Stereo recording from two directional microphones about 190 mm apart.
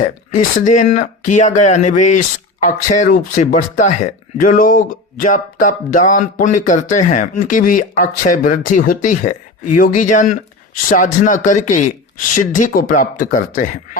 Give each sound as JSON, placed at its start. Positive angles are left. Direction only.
{"t": 0.3, "sound": "speech", "side_deg": 40}